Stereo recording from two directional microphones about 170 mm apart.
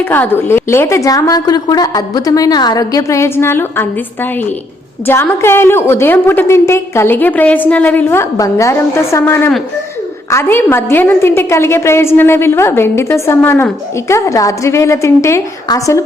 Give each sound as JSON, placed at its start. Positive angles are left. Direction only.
{"t": 0.0, "sound": "a woman's voice", "side_deg": 10}